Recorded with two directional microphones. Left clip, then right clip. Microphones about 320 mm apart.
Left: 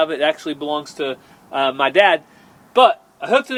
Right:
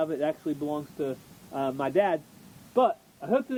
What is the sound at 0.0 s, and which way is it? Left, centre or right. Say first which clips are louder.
Speech: left 10 dB; centre.